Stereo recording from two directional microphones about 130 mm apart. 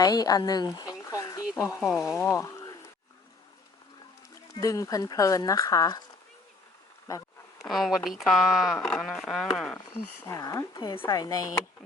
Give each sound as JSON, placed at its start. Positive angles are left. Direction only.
{"t": 0.0, "sound": "a sound", "side_deg": 30}
{"t": 1.5, "sound": "speech", "side_deg": 25}
{"t": 1.8, "sound": "speech", "side_deg": 0}
{"t": 2.3, "sound": "a sound", "side_deg": 25}
{"t": 4.5, "sound": "speech", "side_deg": 25}
{"t": 7.7, "sound": "speech", "side_deg": 0}
{"t": 9.7, "sound": "speech", "side_deg": 20}
{"t": 10.8, "sound": "a woman's voice", "side_deg": 35}
{"t": 11.0, "sound": "speech", "side_deg": 25}